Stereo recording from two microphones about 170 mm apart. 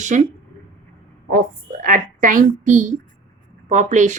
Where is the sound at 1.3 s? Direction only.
55° right (ahead or behind).